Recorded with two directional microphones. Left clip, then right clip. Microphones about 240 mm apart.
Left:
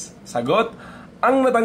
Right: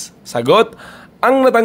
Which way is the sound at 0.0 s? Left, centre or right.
Right.